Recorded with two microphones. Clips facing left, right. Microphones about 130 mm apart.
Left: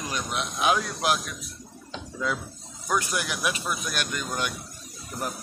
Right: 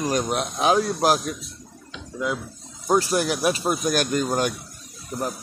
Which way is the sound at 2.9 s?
35° right (ahead or behind).